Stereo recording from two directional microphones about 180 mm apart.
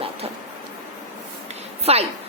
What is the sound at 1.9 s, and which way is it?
Speech, 35° right (ahead or behind).